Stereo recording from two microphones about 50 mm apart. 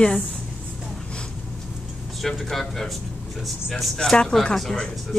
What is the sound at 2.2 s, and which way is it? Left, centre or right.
Speech, centre.